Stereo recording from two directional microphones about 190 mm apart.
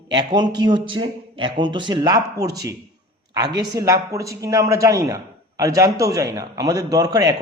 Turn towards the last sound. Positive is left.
turn(degrees=-20)  # may be behind; listen again after turning